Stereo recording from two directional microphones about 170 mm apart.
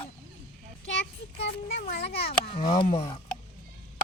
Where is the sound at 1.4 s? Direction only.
70° left (ahead or behind).